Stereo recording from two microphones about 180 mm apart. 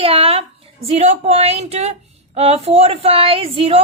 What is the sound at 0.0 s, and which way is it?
A woman's voice, 30° right (ahead or behind).